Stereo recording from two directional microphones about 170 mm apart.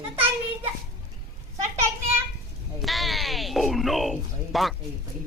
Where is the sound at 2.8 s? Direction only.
Centre (ahead or behind).